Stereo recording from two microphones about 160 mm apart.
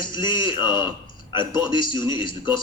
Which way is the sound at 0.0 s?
30° left (ahead or behind).